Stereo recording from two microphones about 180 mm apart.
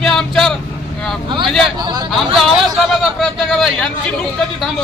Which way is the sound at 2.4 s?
Centre (ahead or behind).